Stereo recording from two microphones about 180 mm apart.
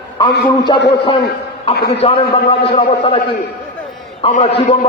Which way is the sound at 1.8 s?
65° left (ahead or behind).